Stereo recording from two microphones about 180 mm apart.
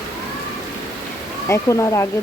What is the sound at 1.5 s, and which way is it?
Speech, 15° left (ahead or behind).